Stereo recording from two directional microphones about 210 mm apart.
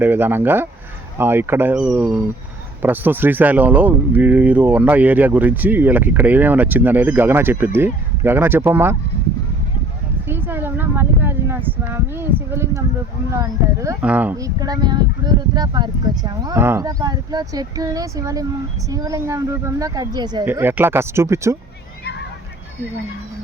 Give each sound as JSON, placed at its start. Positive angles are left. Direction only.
{"t": 0.0, "sound": "speech", "side_deg": -10}
{"t": 10.2, "sound": "a sound", "side_deg": -10}
{"t": 13.3, "sound": "speech", "side_deg": -15}